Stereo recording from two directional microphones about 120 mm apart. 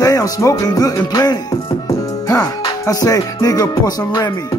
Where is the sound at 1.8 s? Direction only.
30° left (ahead or behind).